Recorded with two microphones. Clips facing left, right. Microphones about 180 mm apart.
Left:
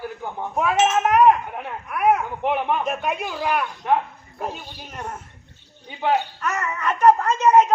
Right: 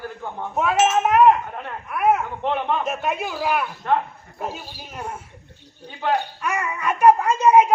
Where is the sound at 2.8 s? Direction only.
Centre (ahead or behind).